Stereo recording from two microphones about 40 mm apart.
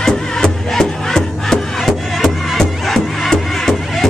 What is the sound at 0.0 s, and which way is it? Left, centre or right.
Music, centre.